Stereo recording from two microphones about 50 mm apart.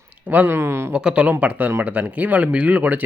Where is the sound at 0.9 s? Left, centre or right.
Right.